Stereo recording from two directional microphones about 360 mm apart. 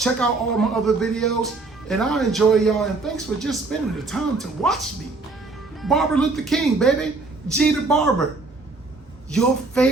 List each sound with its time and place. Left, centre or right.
0.0 s speech: centre
5.8 s speech: centre
9.3 s speech: centre